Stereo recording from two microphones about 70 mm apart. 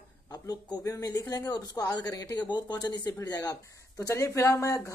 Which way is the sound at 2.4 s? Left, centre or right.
Left.